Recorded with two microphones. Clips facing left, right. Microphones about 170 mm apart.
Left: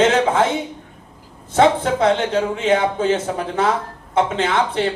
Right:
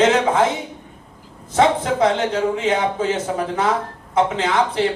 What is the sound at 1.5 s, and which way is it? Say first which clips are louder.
Speech: left 1 dB; 30° left (ahead or behind).